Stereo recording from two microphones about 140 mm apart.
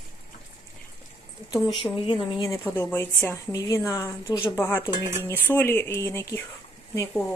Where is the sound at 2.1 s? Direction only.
35° left (ahead or behind).